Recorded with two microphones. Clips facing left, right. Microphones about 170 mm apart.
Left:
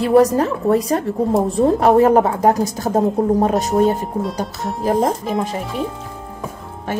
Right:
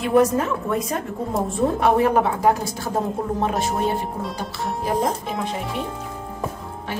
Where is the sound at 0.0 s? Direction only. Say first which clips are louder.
Left 5 dB; 35° left (ahead or behind).